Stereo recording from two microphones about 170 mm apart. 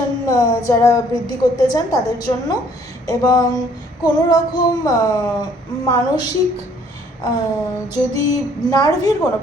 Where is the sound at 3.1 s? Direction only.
20° left (ahead or behind).